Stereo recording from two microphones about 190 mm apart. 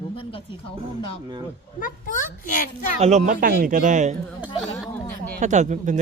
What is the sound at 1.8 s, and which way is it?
Speech, 45° left (ahead or behind).